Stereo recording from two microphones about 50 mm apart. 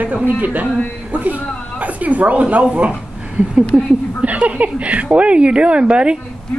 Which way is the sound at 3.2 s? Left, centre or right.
Right.